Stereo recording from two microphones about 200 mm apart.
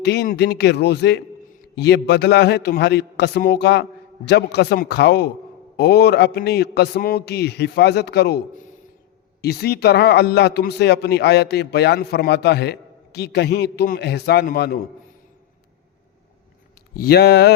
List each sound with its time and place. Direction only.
0.0 s speech: 55° left (ahead or behind)
16.9 s speech: 50° left (ahead or behind)